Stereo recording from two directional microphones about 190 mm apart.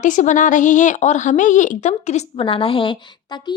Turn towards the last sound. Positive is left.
turn(degrees=25)  # may be behind; listen again after turning